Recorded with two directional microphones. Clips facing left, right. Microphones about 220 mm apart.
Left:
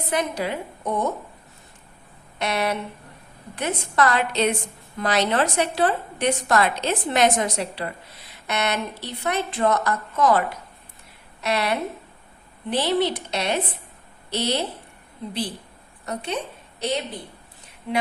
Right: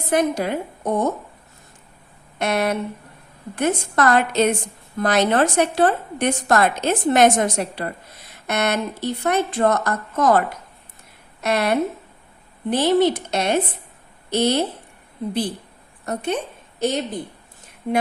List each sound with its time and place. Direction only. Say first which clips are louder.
0.1 s a woman's voice: right 6 dB; 50° right (ahead or behind)
2.4 s a woman's voice: right 4 dB; 50° right (ahead or behind)
16.0 s a woman's voice: right 4 dB; 50° right (ahead or behind)